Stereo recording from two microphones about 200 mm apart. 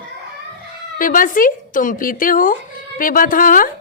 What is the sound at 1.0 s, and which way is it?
Speech, 45° left (ahead or behind).